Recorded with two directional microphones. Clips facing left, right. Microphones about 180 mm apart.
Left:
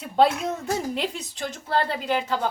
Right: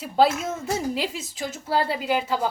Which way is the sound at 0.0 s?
Centre (ahead or behind).